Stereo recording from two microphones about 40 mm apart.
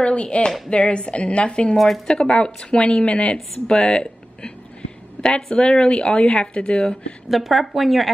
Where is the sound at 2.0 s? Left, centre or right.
Centre.